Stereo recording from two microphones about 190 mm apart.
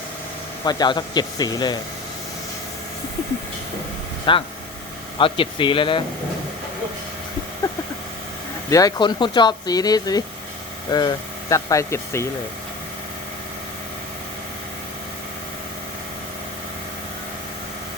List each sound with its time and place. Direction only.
0.6 s speech: 20° left (ahead or behind)
4.3 s speech: 25° left (ahead or behind)
7.6 s a sound: 20° left (ahead or behind)
8.7 s speech: 20° left (ahead or behind)